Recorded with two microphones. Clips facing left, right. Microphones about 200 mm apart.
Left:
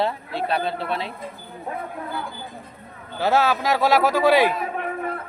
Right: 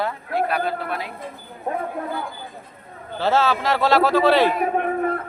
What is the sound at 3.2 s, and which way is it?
Speech, 10° left (ahead or behind).